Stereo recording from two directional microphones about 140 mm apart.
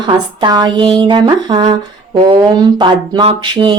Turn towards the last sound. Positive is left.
turn(degrees=-35)  # may be behind; listen again after turning